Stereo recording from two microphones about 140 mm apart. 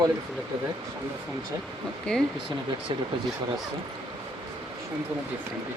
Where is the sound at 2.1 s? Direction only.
5° left (ahead or behind).